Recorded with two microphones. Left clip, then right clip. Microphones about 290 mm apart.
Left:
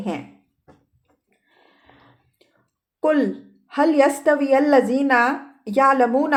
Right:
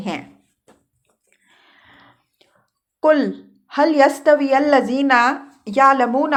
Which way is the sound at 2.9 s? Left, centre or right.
Centre.